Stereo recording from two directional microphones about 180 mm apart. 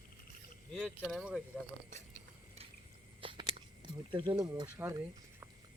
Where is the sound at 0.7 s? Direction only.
5° left (ahead or behind).